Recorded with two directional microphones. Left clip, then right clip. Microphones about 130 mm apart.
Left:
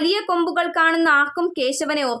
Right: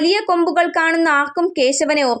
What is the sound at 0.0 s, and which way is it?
A woman's voice, 35° right (ahead or behind).